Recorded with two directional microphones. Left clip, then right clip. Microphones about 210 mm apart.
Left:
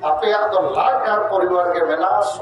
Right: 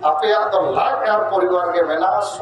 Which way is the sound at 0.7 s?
15° right (ahead or behind).